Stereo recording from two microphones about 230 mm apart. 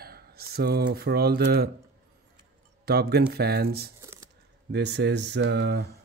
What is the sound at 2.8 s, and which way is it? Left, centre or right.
Speech, right.